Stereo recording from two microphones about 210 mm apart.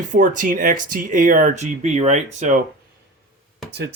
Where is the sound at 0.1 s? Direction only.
40° right (ahead or behind).